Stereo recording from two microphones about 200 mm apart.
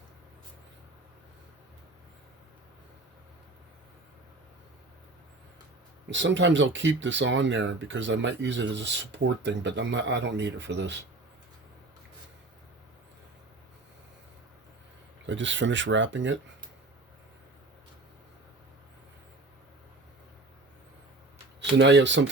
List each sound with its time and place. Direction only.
6.1 s speech: 65° right (ahead or behind)
15.3 s speech: 65° right (ahead or behind)
21.6 s speech: 65° right (ahead or behind)